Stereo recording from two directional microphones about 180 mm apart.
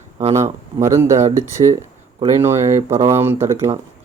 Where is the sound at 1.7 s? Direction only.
40° right (ahead or behind).